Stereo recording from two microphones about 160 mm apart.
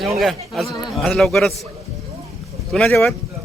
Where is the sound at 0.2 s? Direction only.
Centre (ahead or behind).